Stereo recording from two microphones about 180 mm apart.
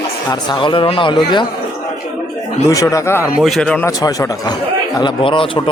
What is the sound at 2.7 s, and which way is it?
Speech, 20° left (ahead or behind).